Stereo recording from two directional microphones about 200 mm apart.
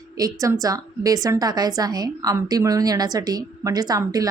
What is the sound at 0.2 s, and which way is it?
A woman's voice, 15° right (ahead or behind).